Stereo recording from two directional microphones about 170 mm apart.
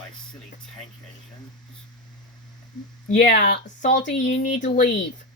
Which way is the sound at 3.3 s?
70° left (ahead or behind).